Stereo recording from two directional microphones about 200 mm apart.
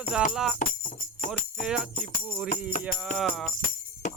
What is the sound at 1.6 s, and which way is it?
Speech, 5° right (ahead or behind).